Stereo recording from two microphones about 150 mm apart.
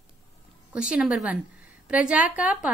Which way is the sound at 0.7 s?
10° right (ahead or behind).